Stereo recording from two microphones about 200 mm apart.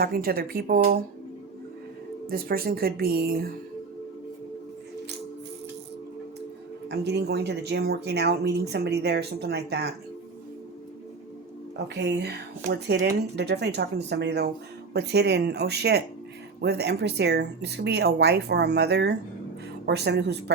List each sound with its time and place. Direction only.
0.0 s speech: 50° right (ahead or behind)
2.3 s speech: 50° right (ahead or behind)
6.8 s speech: 55° right (ahead or behind)
11.9 s speech: 55° right (ahead or behind)